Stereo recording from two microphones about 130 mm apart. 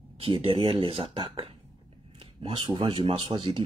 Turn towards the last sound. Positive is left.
turn(degrees=-40)  # may be behind; listen again after turning